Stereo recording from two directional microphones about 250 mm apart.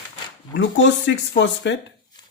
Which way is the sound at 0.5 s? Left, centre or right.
Left.